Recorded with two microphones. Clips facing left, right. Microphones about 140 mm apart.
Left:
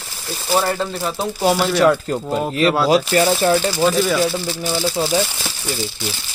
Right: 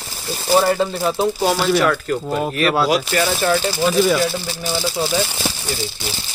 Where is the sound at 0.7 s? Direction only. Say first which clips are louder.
Right 4 dB; 5° right (ahead or behind).